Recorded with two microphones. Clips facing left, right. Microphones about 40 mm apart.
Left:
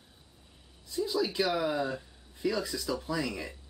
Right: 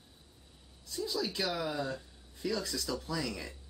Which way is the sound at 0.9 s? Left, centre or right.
Centre.